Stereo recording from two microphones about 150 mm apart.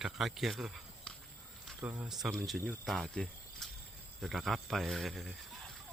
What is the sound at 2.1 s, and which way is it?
Speech, centre (ahead or behind).